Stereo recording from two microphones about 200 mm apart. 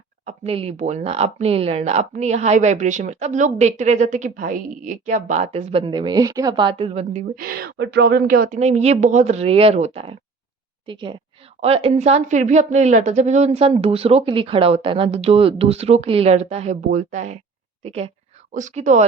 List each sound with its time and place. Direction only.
0.3 s a woman's voice: 30° right (ahead or behind)
7.3 s a woman's voice: 50° right (ahead or behind)